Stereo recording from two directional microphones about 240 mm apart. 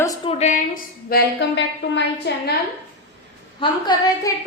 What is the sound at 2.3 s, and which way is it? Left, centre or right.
Speech, left.